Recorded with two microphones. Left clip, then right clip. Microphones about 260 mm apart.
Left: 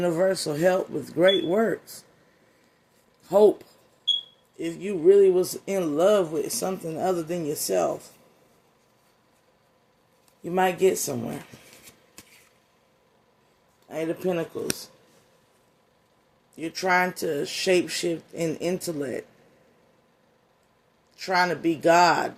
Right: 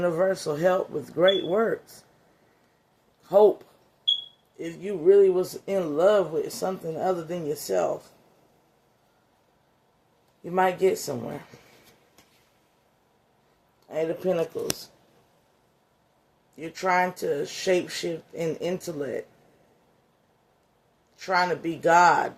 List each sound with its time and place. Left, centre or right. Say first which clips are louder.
0.0 s speech: left 1 dB; left
3.2 s speech: even; left
4.5 s speech: left 2 dB; left
10.4 s speech: left 1 dB; left
13.8 s speech: right 2 dB; left
16.6 s speech: left 1 dB; left
21.2 s speech: left 1 dB; left